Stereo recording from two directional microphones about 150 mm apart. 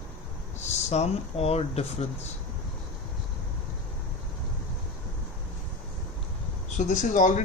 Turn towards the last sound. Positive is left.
turn(degrees=55)  # may be behind; listen again after turning